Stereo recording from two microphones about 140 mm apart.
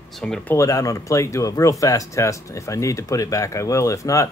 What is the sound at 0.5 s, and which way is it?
Speech, 25° left (ahead or behind).